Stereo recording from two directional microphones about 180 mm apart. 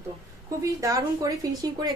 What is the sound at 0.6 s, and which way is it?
A woman's voice, 20° right (ahead or behind).